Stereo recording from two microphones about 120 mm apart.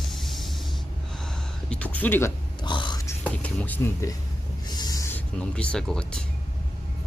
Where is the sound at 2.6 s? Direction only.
40° left (ahead or behind).